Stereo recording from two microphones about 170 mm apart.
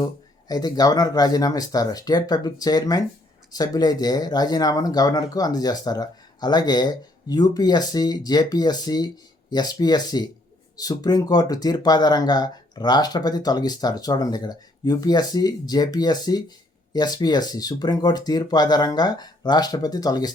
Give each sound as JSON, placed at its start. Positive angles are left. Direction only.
{"t": 0.4, "sound": "speech", "side_deg": 25}